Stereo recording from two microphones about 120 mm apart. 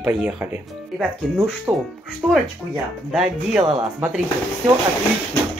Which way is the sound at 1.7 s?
20° right (ahead or behind).